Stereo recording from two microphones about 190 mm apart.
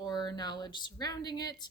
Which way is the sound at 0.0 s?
20° left (ahead or behind).